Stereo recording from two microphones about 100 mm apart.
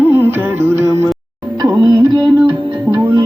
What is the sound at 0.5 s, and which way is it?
Music, 25° right (ahead or behind).